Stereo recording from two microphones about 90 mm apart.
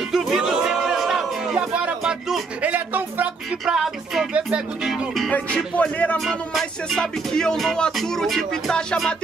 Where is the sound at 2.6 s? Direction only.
20° right (ahead or behind).